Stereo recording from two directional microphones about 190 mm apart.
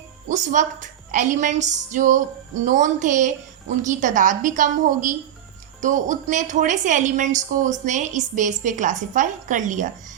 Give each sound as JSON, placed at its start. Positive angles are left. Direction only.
{"t": 0.3, "sound": "a woman's voice", "side_deg": -40}